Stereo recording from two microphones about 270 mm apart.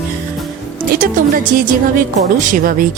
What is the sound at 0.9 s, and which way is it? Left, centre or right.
A woman's voice, right.